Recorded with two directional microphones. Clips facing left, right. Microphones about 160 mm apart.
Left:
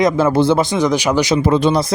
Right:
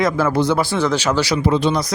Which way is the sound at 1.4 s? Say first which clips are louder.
Left 3 dB; 50° left (ahead or behind).